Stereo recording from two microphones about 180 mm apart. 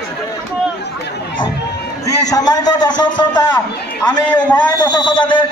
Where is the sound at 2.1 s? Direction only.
20° left (ahead or behind).